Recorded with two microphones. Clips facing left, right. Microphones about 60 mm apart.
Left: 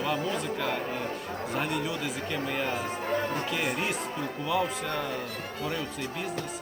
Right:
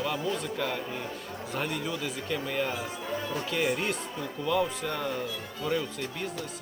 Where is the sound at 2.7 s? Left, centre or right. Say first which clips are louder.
Left 4 dB; left.